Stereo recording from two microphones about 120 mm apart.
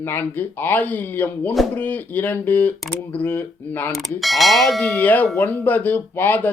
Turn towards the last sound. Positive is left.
turn(degrees=15)  # may be behind; listen again after turning